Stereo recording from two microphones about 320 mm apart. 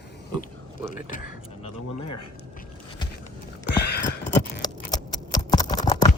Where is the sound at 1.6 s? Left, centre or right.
Left.